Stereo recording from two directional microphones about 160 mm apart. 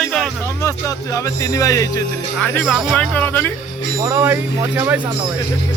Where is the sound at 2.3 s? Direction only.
5° left (ahead or behind).